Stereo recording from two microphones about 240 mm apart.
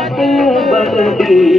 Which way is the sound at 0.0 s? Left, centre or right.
Centre.